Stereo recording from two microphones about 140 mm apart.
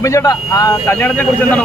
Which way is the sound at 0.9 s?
10° left (ahead or behind).